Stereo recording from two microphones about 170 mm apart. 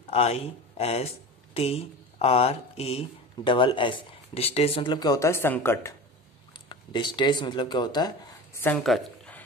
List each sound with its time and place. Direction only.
0.1 s speech: 35° left (ahead or behind); by 5.9 s 15° left (ahead or behind)
6.5 s speech: 25° left (ahead or behind)
8.7 s a sound: centre (ahead or behind)